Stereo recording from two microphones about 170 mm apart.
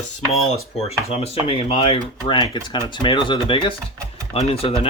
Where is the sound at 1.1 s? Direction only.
35° left (ahead or behind).